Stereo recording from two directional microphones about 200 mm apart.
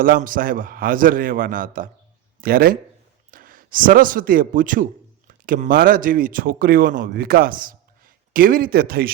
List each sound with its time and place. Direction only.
0.0 s a man's voice: 45° right (ahead or behind)